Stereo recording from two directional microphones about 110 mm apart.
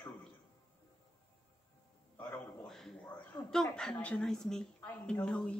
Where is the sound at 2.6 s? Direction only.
5° left (ahead or behind).